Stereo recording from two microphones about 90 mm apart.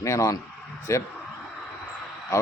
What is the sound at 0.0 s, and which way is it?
Speech, 35° left (ahead or behind).